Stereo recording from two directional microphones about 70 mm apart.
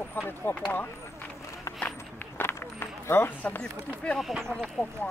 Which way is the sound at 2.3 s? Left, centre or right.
Left.